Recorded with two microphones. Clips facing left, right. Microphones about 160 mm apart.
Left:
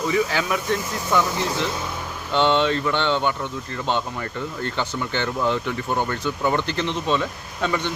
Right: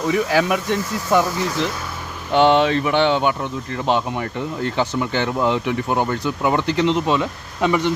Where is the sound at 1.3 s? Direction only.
25° left (ahead or behind).